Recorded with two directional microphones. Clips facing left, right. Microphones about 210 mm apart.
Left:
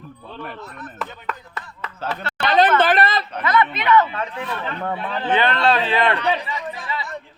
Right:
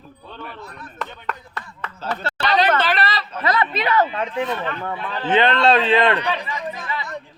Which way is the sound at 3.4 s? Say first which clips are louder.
Left 1 dB; 35° right (ahead or behind).